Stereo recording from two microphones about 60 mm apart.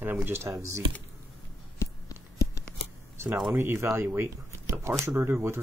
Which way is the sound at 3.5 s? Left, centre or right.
Right.